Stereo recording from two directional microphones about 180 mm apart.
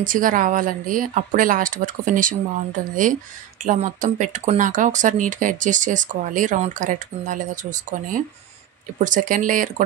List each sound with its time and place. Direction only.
0.0 s speech: 50° right (ahead or behind)